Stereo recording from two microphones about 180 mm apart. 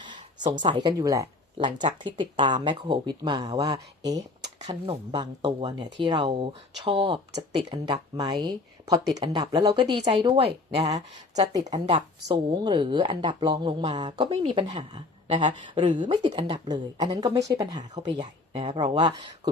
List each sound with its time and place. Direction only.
0.6 s speech: 25° right (ahead or behind)
11.3 s speech: 20° right (ahead or behind)